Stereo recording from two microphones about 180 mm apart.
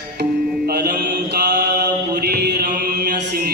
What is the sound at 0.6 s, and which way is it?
Mantra, 60° right (ahead or behind).